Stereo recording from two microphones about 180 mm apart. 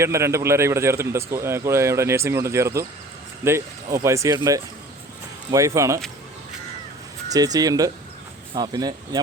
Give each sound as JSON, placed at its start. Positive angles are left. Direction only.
{"t": 0.0, "sound": "a man's voice", "side_deg": -15}
{"t": 7.3, "sound": "speech", "side_deg": -20}